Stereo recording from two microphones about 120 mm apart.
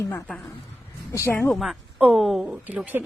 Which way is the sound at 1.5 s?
Centre (ahead or behind).